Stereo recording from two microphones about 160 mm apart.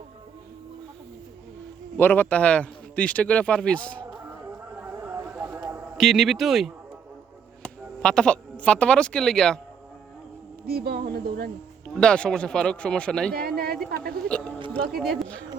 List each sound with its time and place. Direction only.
2.0 s a man's voice: 10° left (ahead or behind)
4.1 s a sound: 15° right (ahead or behind)
6.0 s speech: centre (ahead or behind)
10.7 s a woman's voice: 75° right (ahead or behind)
11.9 s speech: 5° left (ahead or behind)
13.3 s a woman's voice: 75° right (ahead or behind)
14.3 s a man's voice: 5° left (ahead or behind)